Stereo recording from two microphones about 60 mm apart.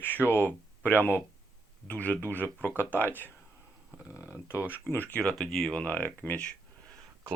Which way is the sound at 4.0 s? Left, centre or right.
Right.